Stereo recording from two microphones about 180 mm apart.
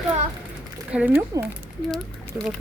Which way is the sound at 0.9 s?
10° right (ahead or behind).